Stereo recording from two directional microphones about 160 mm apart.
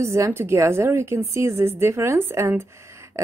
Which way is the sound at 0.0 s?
15° right (ahead or behind).